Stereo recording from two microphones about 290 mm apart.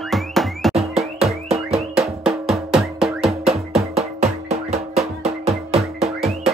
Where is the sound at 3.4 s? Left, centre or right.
Right.